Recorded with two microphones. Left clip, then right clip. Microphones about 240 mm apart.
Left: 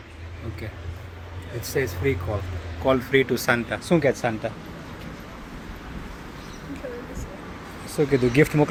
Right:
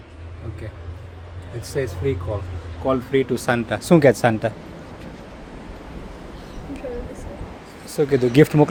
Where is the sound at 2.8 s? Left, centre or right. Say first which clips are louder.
Even; centre; by 4.5 s right.